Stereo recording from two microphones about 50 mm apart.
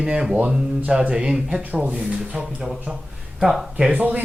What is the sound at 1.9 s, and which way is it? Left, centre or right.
Speech, centre.